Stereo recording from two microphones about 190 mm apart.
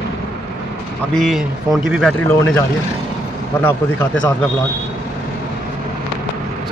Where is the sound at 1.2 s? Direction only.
Centre (ahead or behind).